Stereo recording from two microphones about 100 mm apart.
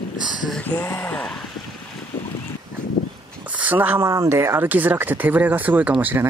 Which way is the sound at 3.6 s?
15° right (ahead or behind).